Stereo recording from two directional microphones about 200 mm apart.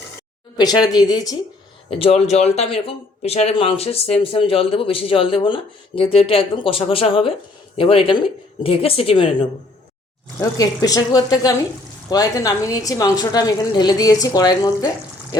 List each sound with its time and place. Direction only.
0.5 s speech: 20° left (ahead or behind)
1.9 s speech: 30° left (ahead or behind)
10.6 s a woman's voice: 20° left (ahead or behind)